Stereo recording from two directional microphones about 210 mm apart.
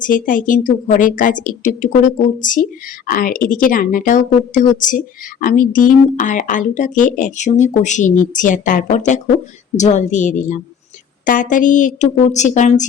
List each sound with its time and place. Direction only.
0.0 s speech: 40° left (ahead or behind)